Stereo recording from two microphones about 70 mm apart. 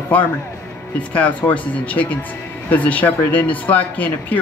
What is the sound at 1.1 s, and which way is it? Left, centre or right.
Speech, centre.